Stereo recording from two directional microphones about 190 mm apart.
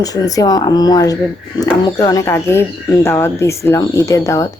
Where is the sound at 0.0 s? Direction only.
20° left (ahead or behind).